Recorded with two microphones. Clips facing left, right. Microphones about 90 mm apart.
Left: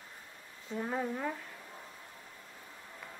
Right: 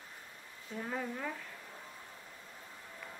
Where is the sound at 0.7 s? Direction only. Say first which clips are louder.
Left 4 dB; 15° left (ahead or behind).